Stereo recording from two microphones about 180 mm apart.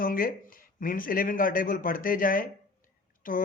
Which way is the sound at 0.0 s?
50° left (ahead or behind).